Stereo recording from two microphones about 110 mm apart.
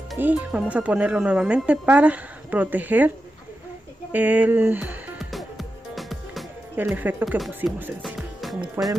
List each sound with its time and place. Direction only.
0.2 s speech: 10° right (ahead or behind)
4.1 s speech: 15° right (ahead or behind)
5.2 s music: centre (ahead or behind)
7.0 s speech: 15° right (ahead or behind)
7.3 s speech: centre (ahead or behind)
8.0 s music: centre (ahead or behind)
8.8 s speech: 25° right (ahead or behind)